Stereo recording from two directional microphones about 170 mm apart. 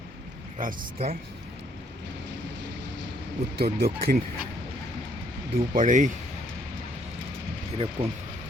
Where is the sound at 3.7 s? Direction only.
65° right (ahead or behind).